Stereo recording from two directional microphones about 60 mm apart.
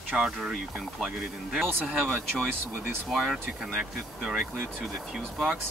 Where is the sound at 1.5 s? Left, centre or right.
Centre.